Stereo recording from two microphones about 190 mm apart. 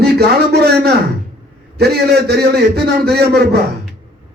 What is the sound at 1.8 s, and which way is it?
A man's voice, 55° right (ahead or behind).